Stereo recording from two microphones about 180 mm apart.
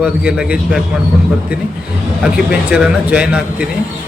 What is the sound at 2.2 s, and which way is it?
Speech, 5° right (ahead or behind).